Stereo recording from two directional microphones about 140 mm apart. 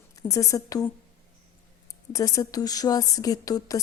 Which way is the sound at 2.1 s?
25° left (ahead or behind).